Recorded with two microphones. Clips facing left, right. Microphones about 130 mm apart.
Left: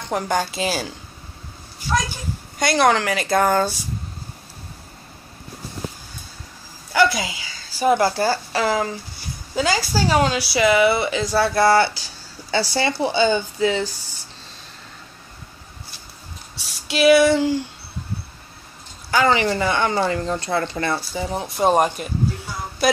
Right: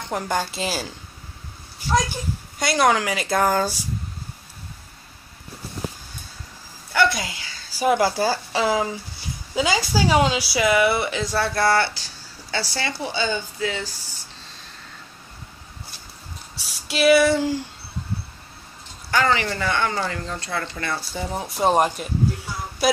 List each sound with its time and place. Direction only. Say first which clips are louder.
0.1 s speech: left 3 dB; centre (ahead or behind)
2.6 s speech: left 2 dB; 5° right (ahead or behind)
6.9 s speech: left 2 dB; 5° left (ahead or behind)
7.8 s speech: left 2 dB; 10° right (ahead or behind)
10.5 s speech: left 4 dB; centre (ahead or behind)
12.4 s speech: left 6 dB; 20° left (ahead or behind)
16.8 s speech: left 2 dB; centre (ahead or behind)
19.2 s speech: left 6 dB; 20° left (ahead or behind)
21.1 s speech: left 3 dB; 5° left (ahead or behind)